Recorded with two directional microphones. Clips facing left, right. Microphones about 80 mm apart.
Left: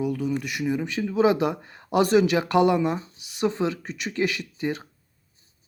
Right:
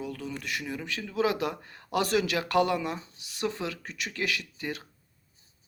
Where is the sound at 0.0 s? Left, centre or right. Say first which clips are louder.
Left 10 dB; centre.